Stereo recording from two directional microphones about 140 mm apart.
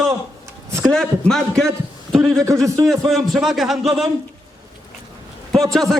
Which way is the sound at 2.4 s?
25° right (ahead or behind).